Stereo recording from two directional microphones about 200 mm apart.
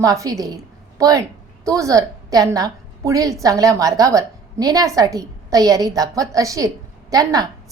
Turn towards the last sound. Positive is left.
turn(degrees=-20)  # may be behind; listen again after turning